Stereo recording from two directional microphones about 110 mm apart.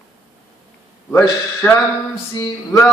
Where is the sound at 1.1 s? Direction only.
20° left (ahead or behind).